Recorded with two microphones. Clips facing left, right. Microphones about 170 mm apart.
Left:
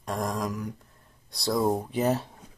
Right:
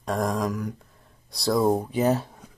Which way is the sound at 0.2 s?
Centre (ahead or behind).